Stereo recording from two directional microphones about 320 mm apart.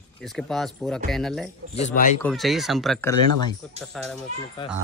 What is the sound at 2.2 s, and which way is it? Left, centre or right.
Speech, centre.